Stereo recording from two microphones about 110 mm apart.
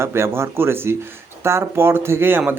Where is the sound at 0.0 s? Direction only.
25° right (ahead or behind).